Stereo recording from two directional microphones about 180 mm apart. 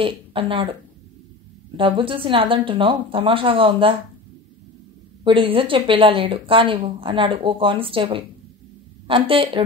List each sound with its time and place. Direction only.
0.0 s speech: 30° right (ahead or behind)
1.8 s speech: 30° right (ahead or behind)
5.2 s speech: 30° right (ahead or behind)